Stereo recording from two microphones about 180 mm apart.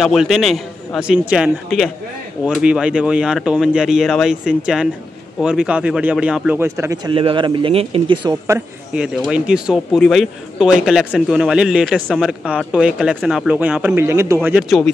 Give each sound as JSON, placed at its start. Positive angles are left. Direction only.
{"t": 0.0, "sound": "speech", "side_deg": 0}
{"t": 7.1, "sound": "speech", "side_deg": -30}
{"t": 8.5, "sound": "speech", "side_deg": -10}
{"t": 14.6, "sound": "speech", "side_deg": 0}